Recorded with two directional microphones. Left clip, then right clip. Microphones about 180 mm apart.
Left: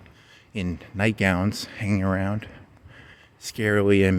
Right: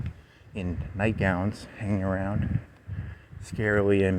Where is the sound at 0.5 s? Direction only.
55° left (ahead or behind).